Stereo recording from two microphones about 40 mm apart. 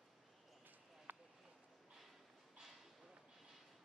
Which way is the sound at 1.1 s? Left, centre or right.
Right.